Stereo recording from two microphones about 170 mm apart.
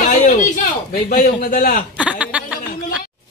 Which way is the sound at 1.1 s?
55° left (ahead or behind).